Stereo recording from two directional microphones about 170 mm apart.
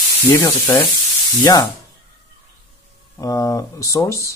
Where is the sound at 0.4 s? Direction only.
15° left (ahead or behind).